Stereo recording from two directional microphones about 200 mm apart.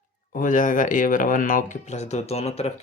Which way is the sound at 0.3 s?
40° left (ahead or behind).